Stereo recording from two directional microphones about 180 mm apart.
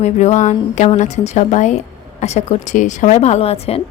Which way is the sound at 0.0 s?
40° left (ahead or behind).